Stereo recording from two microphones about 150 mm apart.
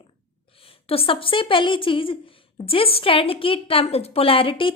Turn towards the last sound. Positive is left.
turn(degrees=35)  # may be behind; listen again after turning